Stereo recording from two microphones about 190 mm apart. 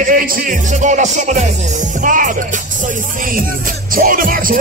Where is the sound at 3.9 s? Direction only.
45° right (ahead or behind).